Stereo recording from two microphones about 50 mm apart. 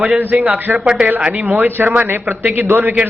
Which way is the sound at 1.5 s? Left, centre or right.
Right.